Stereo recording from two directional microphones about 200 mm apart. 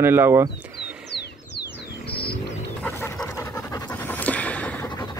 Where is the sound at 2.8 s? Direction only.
10° left (ahead or behind).